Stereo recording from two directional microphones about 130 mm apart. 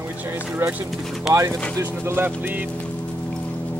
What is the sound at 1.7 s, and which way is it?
Speech, 20° right (ahead or behind).